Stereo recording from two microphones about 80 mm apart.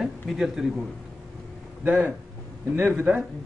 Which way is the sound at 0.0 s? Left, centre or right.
Centre.